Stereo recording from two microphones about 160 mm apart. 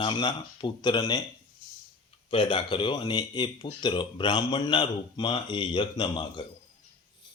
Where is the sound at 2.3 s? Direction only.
30° left (ahead or behind).